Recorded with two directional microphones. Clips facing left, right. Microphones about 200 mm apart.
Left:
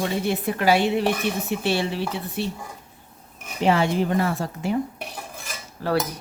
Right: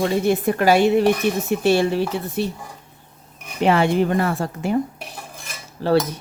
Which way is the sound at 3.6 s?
60° right (ahead or behind).